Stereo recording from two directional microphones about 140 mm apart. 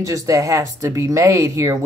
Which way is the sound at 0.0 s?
25° right (ahead or behind).